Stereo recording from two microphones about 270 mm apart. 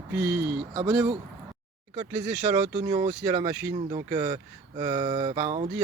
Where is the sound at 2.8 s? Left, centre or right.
Centre.